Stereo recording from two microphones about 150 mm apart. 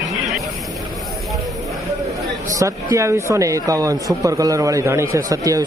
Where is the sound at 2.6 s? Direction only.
20° right (ahead or behind).